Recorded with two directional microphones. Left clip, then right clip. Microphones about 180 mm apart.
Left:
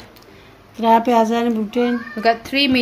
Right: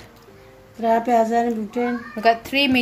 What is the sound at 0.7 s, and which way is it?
A child's voice, 40° left (ahead or behind).